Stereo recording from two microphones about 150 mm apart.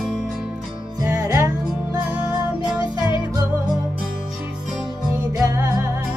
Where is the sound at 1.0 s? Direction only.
20° right (ahead or behind).